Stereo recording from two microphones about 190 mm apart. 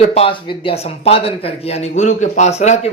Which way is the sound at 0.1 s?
30° left (ahead or behind).